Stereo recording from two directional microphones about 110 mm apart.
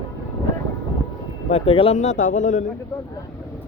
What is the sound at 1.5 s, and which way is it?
Speech, 60° left (ahead or behind).